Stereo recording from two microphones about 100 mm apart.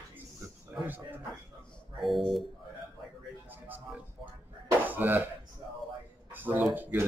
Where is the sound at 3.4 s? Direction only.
20° right (ahead or behind).